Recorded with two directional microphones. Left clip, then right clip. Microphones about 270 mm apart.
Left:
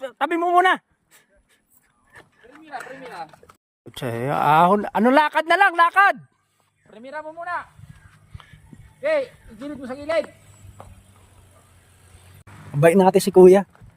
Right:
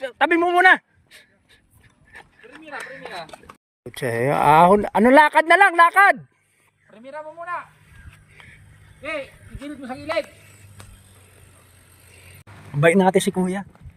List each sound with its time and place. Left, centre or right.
0.0 s a sound: centre
3.9 s speech: centre
9.0 s speech: centre
12.8 s speech: left